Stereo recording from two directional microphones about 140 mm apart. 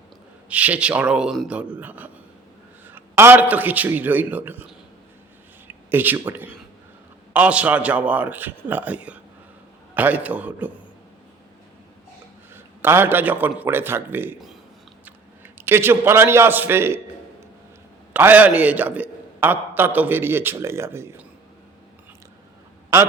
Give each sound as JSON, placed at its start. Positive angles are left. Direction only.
{"t": 0.4, "sound": "a man's voice", "side_deg": -10}
{"t": 5.6, "sound": "a sound", "side_deg": -15}
{"t": 7.3, "sound": "a man's voice", "side_deg": -10}
{"t": 12.5, "sound": "a man's voice", "side_deg": -15}
{"t": 18.1, "sound": "a man's voice", "side_deg": -10}